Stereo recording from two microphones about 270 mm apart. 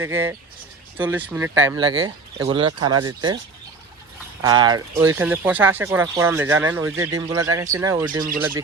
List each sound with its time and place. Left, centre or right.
0.0 s speech: centre
1.8 s speech: centre
4.4 s speech: centre